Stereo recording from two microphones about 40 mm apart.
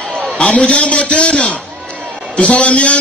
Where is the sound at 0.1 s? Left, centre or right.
Centre.